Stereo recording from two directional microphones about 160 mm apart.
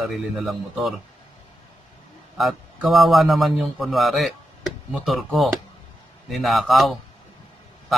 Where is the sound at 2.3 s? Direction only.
Centre (ahead or behind).